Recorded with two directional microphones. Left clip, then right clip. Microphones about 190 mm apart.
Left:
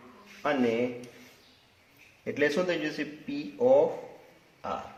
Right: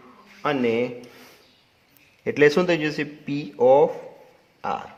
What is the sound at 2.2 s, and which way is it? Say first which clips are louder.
Speech: right 9 dB; 60° right (ahead or behind).